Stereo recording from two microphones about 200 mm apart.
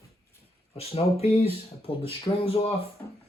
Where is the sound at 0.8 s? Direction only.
30° left (ahead or behind).